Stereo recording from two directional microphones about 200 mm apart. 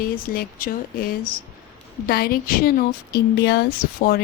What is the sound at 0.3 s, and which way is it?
Speech, 50° left (ahead or behind).